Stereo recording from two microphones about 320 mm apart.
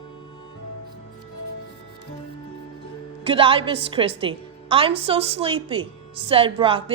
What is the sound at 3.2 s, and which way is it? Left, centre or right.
A woman's voice, centre.